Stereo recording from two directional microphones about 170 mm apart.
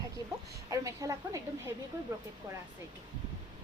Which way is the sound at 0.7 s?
20° right (ahead or behind).